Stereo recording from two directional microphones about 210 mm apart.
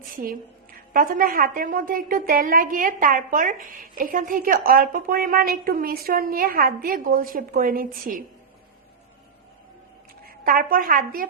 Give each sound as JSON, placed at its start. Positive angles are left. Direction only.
{"t": 0.2, "sound": "a woman's voice", "side_deg": -40}
{"t": 10.2, "sound": "a woman's voice", "side_deg": -45}